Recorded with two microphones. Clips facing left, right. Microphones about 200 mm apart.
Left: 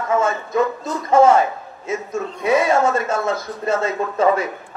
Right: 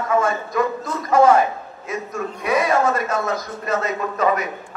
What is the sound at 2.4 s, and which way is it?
A man's voice, 25° left (ahead or behind).